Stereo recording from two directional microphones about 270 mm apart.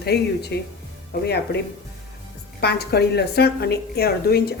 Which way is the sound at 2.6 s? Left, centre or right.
Left.